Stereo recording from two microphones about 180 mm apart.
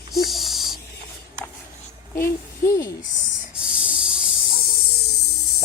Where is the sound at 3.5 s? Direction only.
5° right (ahead or behind).